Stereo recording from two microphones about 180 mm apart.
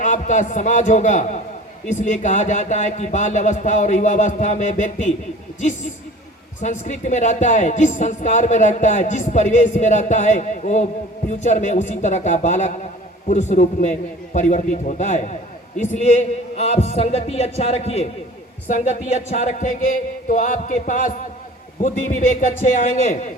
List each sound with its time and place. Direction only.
0.0 s speech: 45° left (ahead or behind)